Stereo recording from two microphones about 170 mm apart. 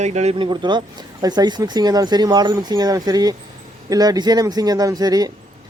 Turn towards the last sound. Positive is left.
turn(degrees=-20)  # may be behind; listen again after turning